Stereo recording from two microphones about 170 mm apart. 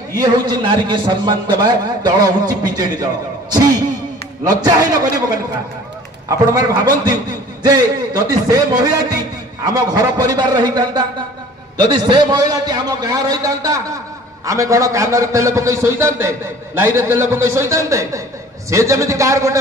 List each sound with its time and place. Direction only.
0.2 s a man's voice: 25° right (ahead or behind)
6.2 s a man's voice: 20° right (ahead or behind)